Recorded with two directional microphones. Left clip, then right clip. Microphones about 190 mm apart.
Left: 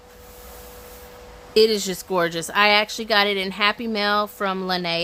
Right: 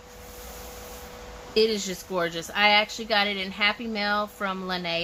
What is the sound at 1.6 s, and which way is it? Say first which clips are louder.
Speech: left 6 dB; 55° left (ahead or behind).